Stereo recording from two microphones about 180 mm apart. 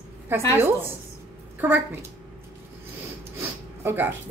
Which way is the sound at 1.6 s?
10° right (ahead or behind).